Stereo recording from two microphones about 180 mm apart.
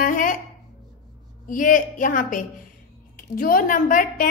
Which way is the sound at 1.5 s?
50° left (ahead or behind).